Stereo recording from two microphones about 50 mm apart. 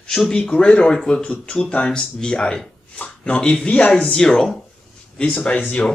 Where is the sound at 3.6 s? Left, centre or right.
Left.